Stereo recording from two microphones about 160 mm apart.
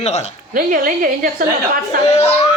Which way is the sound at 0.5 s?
60° right (ahead or behind).